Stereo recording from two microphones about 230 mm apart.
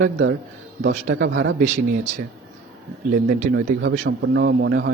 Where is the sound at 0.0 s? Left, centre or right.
Right.